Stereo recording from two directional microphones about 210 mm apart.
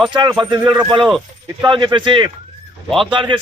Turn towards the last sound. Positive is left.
turn(degrees=-25)  # may be behind; listen again after turning